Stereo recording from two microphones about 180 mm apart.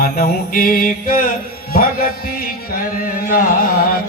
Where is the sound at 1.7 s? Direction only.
55° left (ahead or behind).